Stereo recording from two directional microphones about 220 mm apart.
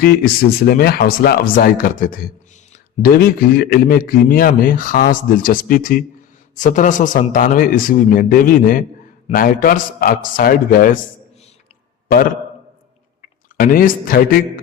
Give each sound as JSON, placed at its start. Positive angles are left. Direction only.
{"t": 0.0, "sound": "a man's voice", "side_deg": 45}
{"t": 13.2, "sound": "speech", "side_deg": 40}